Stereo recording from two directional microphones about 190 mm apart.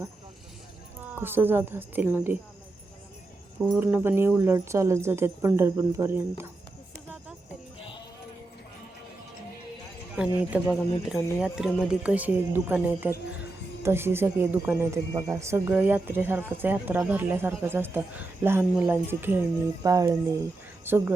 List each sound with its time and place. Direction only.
1.0 s speech: 10° right (ahead or behind)
3.8 s speech: 10° right (ahead or behind)
6.9 s a sound: 10° right (ahead or behind)
10.2 s speech: 5° right (ahead or behind)